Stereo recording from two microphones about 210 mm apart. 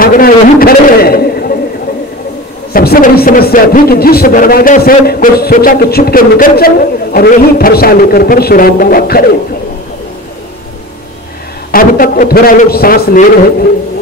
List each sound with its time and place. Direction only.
0.0 s a sound: 45° left (ahead or behind)
2.7 s a man's voice: 45° left (ahead or behind)
11.7 s a man's voice: 40° left (ahead or behind)